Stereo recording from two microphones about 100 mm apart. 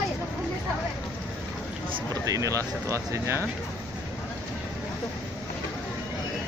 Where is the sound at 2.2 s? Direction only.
35° right (ahead or behind).